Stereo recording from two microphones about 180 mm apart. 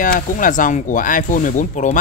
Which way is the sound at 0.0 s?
50° left (ahead or behind).